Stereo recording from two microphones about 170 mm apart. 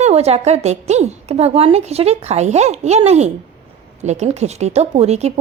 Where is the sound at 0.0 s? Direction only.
40° right (ahead or behind).